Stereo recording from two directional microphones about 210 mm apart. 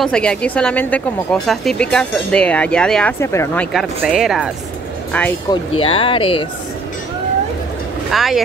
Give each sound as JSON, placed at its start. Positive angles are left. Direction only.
{"t": 0.0, "sound": "speech", "side_deg": 5}
{"t": 3.7, "sound": "speech", "side_deg": 0}
{"t": 5.5, "sound": "speech", "side_deg": 25}
{"t": 8.1, "sound": "speech", "side_deg": 0}